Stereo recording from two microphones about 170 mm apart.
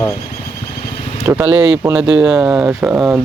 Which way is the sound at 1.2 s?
15° right (ahead or behind).